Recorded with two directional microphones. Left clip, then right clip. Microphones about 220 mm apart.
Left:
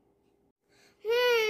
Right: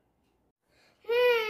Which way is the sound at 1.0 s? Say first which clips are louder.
Right 1 dB; 40° left (ahead or behind).